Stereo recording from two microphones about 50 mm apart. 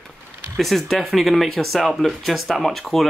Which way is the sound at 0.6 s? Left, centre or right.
Centre.